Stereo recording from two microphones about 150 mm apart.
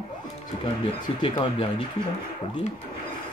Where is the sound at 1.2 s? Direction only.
35° left (ahead or behind).